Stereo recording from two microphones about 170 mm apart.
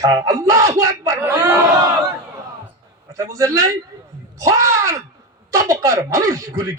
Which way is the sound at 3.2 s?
20° right (ahead or behind).